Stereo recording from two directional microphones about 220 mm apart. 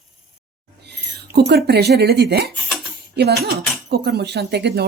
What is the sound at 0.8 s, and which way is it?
Speech, 50° right (ahead or behind).